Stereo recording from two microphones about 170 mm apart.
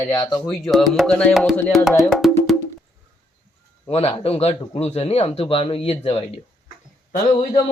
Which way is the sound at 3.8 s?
35° left (ahead or behind).